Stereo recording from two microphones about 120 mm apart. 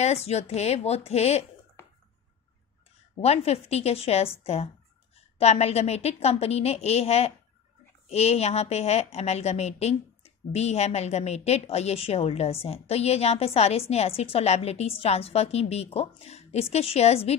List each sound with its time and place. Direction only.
0.0 s a woman's voice: 65° left (ahead or behind)
3.2 s a woman's voice: 60° left (ahead or behind)